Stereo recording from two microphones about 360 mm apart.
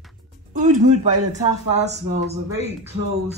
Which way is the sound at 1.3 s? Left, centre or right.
Centre.